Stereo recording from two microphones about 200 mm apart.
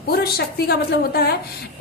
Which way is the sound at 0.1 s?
50° left (ahead or behind).